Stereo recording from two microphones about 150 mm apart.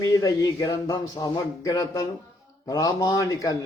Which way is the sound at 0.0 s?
20° left (ahead or behind).